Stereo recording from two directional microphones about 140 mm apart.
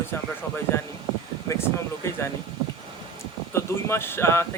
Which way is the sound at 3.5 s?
20° left (ahead or behind).